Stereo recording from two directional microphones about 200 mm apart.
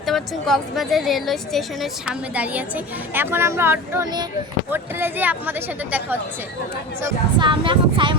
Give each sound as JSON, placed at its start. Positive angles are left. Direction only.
{"t": 0.0, "sound": "a woman's voice", "side_deg": 0}
{"t": 7.0, "sound": "speech", "side_deg": -25}